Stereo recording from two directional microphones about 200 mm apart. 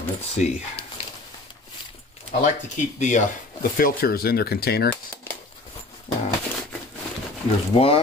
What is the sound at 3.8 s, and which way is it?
Speech, 50° left (ahead or behind).